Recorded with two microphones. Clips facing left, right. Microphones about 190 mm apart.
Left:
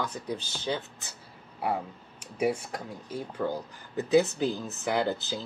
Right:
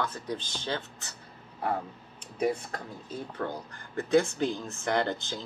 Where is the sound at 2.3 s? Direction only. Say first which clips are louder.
Left 1 dB; 10° left (ahead or behind).